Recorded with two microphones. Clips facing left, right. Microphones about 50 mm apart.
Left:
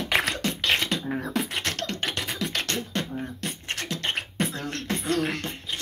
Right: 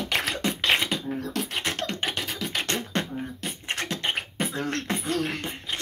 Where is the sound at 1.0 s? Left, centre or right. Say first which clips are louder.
Left 1 dB; left.